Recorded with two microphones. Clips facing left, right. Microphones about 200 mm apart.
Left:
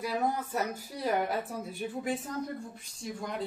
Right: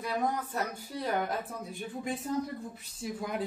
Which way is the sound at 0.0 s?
5° left (ahead or behind).